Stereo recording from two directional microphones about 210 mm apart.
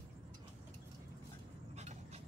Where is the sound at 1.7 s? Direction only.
30° right (ahead or behind).